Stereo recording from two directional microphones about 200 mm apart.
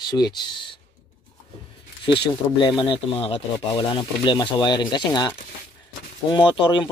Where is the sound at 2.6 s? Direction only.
25° left (ahead or behind).